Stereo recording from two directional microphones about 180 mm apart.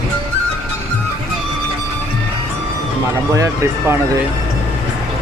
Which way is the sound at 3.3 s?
15° right (ahead or behind).